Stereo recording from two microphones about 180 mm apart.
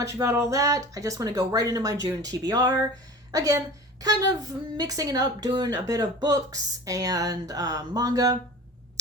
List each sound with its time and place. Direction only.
0.0 s a woman's voice: 15° right (ahead or behind)